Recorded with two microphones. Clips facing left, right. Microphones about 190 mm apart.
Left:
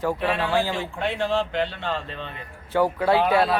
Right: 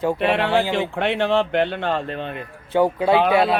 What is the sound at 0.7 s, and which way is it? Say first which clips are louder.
Speech: right 6 dB; 70° right (ahead or behind).